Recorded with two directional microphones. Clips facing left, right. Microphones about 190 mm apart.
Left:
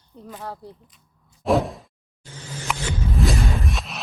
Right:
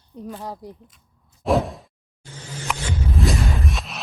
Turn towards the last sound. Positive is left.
turn(degrees=0)  # may be behind; listen again after turning